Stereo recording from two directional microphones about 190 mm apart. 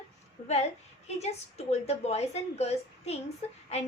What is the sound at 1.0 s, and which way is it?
A woman's voice, 35° left (ahead or behind).